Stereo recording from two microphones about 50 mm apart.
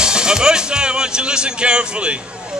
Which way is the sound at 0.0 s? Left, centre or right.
Centre.